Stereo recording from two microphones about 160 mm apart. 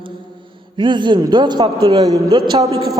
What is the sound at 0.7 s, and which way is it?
A woman's voice, 30° right (ahead or behind).